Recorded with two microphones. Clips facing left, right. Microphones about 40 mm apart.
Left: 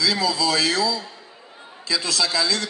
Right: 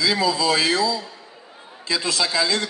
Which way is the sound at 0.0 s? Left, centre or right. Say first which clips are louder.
Right 1 dB; right.